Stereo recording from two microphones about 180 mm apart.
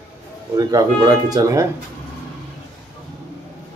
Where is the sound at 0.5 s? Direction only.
20° right (ahead or behind).